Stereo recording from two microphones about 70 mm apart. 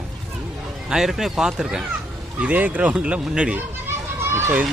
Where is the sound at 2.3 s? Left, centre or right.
Right.